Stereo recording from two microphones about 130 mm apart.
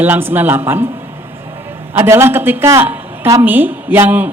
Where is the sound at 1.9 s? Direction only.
20° right (ahead or behind).